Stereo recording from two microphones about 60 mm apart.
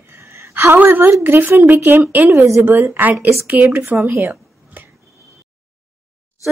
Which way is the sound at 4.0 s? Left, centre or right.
Right.